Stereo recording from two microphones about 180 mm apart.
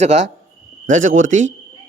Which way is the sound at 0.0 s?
40° right (ahead or behind).